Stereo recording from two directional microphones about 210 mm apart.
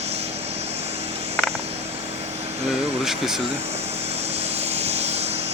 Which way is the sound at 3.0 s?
Centre (ahead or behind).